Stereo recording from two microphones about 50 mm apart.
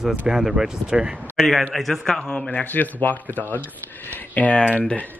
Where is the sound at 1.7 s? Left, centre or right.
Centre; by 2.6 s left.